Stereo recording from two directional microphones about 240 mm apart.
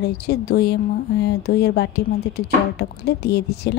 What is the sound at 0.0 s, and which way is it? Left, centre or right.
A woman's voice, left.